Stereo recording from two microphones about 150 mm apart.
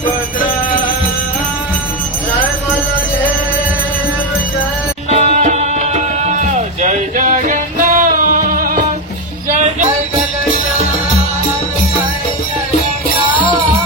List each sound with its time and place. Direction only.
5.1 s music: 50° right (ahead or behind); by 8.8 s 70° right (ahead or behind)
9.5 s music: 55° right (ahead or behind)